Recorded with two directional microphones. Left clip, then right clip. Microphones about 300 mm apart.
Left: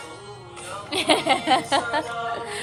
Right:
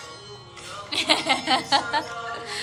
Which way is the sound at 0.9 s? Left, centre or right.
Centre.